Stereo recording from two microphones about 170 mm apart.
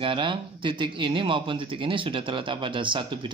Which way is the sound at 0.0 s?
30° right (ahead or behind).